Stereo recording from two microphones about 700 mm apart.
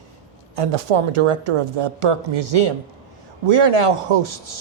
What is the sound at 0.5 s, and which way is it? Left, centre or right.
A man's voice, right.